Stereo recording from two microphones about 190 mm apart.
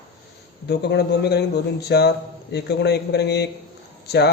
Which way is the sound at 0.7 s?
60° left (ahead or behind).